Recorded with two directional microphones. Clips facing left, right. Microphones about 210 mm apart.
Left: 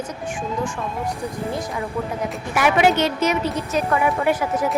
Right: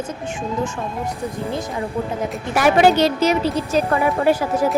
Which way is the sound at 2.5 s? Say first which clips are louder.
Right 3 dB; 35° right (ahead or behind).